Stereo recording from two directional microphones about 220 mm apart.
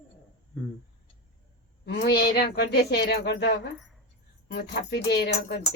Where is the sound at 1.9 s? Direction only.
45° left (ahead or behind).